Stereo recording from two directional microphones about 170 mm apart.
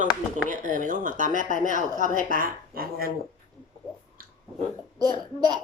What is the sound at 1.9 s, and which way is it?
Speech, 50° left (ahead or behind).